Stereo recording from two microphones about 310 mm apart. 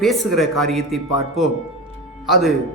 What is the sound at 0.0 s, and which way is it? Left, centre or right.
A man's voice, centre.